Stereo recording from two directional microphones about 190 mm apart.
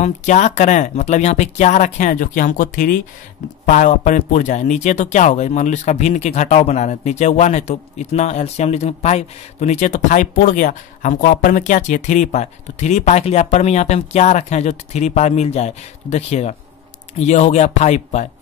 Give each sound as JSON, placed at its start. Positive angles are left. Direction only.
{"t": 0.0, "sound": "speech", "side_deg": 40}